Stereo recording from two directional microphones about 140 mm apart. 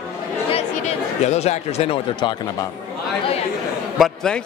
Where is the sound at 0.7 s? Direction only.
55° left (ahead or behind); by 2.6 s 35° left (ahead or behind).